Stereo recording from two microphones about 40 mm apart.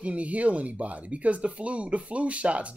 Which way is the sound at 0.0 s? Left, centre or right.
Right.